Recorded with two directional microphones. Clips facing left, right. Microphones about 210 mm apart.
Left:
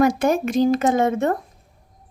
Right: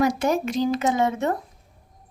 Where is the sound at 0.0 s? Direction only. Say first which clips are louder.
Left 4 dB; 50° left (ahead or behind).